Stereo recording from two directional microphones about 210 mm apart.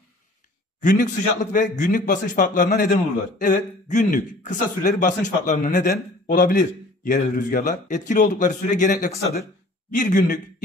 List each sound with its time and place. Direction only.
0.7 s a man's voice: 35° left (ahead or behind)